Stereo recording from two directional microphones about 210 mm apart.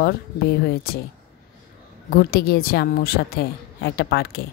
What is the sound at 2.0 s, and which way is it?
A woman's voice, 45° left (ahead or behind).